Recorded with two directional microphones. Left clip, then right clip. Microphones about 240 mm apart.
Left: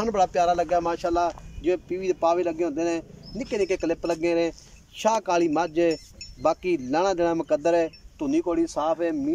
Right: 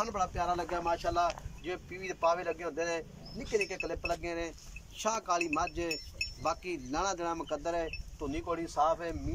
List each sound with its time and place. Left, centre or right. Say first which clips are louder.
0.0 s speech: left 11 dB; left